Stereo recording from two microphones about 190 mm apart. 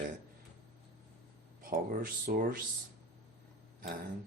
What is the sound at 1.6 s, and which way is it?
Speech, 45° right (ahead or behind).